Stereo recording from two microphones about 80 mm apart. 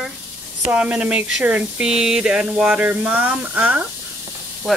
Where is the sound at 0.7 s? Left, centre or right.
Centre.